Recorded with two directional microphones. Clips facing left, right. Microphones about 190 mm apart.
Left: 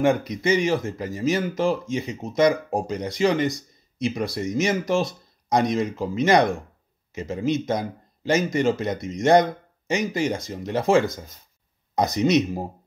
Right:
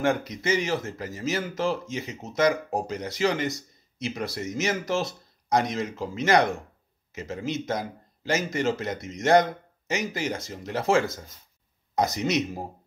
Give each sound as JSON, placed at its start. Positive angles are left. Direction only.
{"t": 0.0, "sound": "speech", "side_deg": 15}